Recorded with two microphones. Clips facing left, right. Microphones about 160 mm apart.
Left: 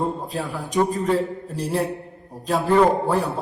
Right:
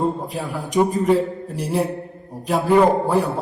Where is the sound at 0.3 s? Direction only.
15° right (ahead or behind).